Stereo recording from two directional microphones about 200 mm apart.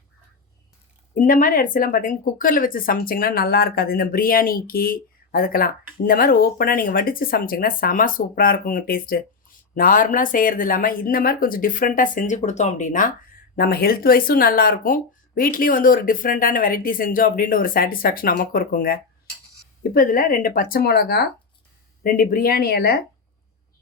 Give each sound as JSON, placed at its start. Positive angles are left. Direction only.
{"t": 1.1, "sound": "speech", "side_deg": 45}